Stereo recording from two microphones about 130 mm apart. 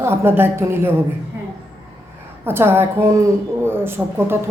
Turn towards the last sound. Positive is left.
turn(degrees=-15)  # may be behind; listen again after turning